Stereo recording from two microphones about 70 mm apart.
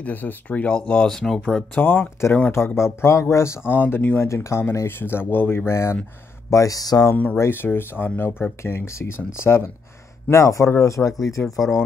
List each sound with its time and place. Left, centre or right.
0.0 s speech: left; by 1.4 s centre
1.8 s speech: left
4.3 s speech: left
6.5 s speech: left
7.3 s speech: left
11.4 s speech: left